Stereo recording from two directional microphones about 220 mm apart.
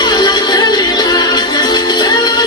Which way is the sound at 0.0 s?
20° left (ahead or behind).